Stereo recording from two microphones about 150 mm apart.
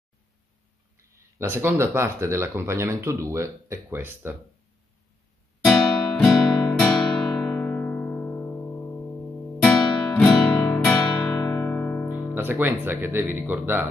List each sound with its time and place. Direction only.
1.1 s speech: 15° right (ahead or behind)
5.6 s guitar: 5° left (ahead or behind)
9.6 s music: 5° left (ahead or behind)
12.4 s speech: 10° right (ahead or behind)